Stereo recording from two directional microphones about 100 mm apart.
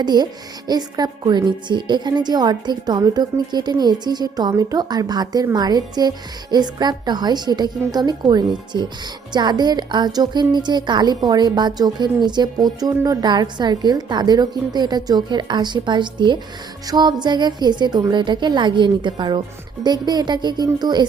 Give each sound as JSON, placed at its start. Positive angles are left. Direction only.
{"t": 0.0, "sound": "a woman's voice", "side_deg": -45}